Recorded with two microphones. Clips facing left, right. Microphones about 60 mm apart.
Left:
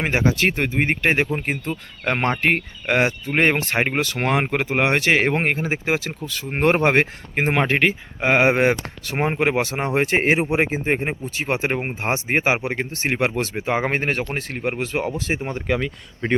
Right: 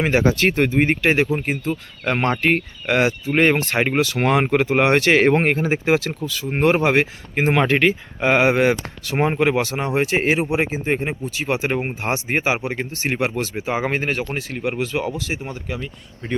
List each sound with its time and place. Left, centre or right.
0.0 s speech: centre
0.8 s speech: left
4.2 s speech: centre
6.2 s speech: left
7.4 s speech: centre
9.1 s speech: centre
12.5 s speech: left
13.0 s speech: left
15.6 s speech: left